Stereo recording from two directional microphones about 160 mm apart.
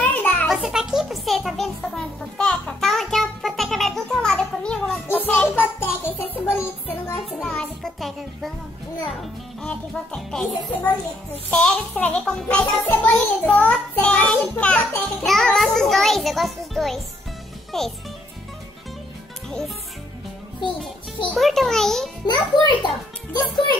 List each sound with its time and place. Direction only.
0.0 s music: 10° left (ahead or behind)
0.5 s music: centre (ahead or behind); by 7.2 s 15° left (ahead or behind)
7.2 s music: 5° left (ahead or behind)
9.6 s a child's voice: 5° left (ahead or behind)
15.2 s music: 5° left (ahead or behind)
17.7 s a child's voice: centre (ahead or behind)
21.4 s music: centre (ahead or behind)
22.2 s a sound: 30° left (ahead or behind)